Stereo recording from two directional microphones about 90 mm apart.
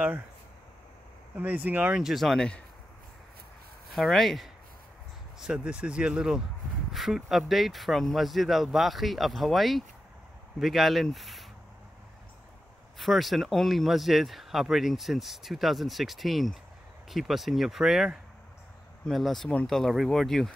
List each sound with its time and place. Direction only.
1.3 s speech: 15° right (ahead or behind)
2.0 s speech: 5° right (ahead or behind)
3.9 s speech: centre (ahead or behind)
5.4 s speech: 10° right (ahead or behind)
12.9 s speech: centre (ahead or behind)